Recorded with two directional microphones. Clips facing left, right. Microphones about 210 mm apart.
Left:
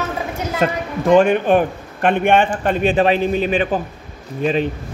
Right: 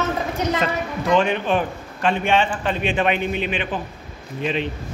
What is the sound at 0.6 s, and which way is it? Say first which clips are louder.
A woman's voice: left 4 dB; 50° left (ahead or behind).